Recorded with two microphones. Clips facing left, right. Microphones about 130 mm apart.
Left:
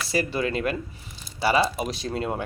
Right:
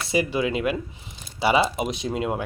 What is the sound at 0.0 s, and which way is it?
Speech, 20° right (ahead or behind).